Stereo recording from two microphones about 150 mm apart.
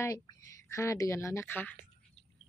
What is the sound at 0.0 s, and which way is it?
Speech, 20° left (ahead or behind).